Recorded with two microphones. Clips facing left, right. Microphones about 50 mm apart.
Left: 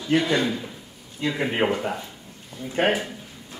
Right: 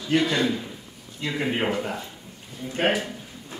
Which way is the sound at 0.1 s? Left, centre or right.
Centre.